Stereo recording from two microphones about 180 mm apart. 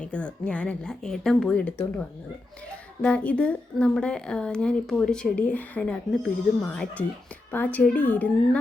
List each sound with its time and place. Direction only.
0.0 s speech: 5° left (ahead or behind)
3.0 s a woman's voice: 5° left (ahead or behind)